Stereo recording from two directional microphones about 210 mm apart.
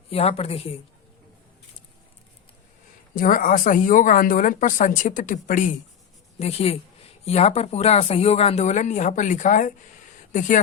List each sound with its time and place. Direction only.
0.1 s a woman's voice: 30° left (ahead or behind)
3.2 s a woman's voice: 40° left (ahead or behind)